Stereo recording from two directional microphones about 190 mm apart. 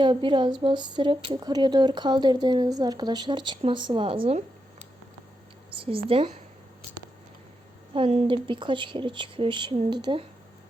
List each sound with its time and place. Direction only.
0.0 s speech: 25° right (ahead or behind)
5.7 s speech: 30° right (ahead or behind)
7.9 s speech: 30° right (ahead or behind)